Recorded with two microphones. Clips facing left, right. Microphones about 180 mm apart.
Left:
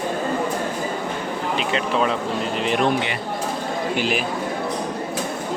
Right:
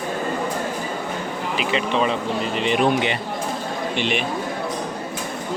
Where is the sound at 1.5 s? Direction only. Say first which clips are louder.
Right 1 dB; centre (ahead or behind).